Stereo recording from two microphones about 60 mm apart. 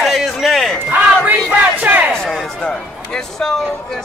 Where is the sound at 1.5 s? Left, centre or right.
Right.